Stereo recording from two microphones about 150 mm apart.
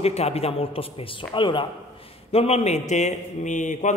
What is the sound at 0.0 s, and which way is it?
Speech, 45° left (ahead or behind).